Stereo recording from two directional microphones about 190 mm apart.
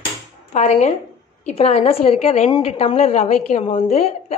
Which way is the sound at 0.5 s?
35° left (ahead or behind).